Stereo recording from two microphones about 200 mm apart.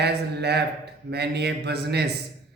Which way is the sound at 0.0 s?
55° right (ahead or behind).